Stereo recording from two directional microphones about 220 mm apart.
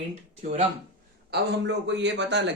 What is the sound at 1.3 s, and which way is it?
Speech, 55° right (ahead or behind).